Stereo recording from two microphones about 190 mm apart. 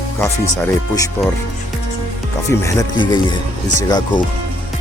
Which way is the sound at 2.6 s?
25° left (ahead or behind).